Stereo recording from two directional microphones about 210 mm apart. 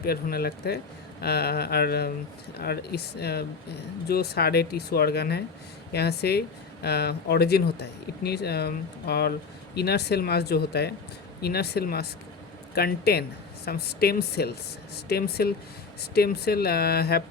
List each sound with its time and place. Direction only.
0.0 s speech: 45° left (ahead or behind)